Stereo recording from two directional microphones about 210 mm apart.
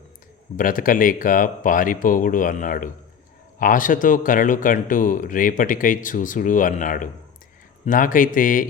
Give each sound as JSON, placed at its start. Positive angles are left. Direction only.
{"t": 0.5, "sound": "speech", "side_deg": 40}